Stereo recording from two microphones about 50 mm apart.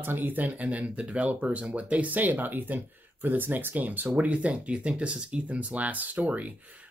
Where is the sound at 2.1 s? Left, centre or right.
Right.